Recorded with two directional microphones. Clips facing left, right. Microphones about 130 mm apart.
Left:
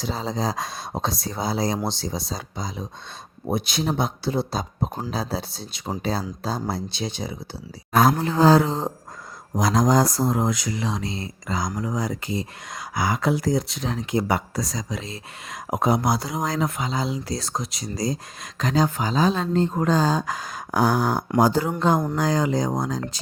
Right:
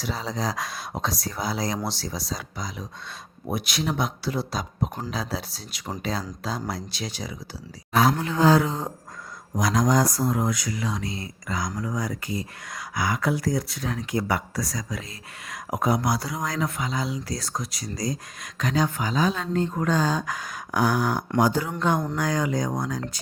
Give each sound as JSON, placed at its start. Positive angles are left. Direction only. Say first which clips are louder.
{"t": 0.0, "sound": "speech", "louder": "left 3 dB", "side_deg": 25}
{"t": 20.7, "sound": "speech", "louder": "left 2 dB", "side_deg": 40}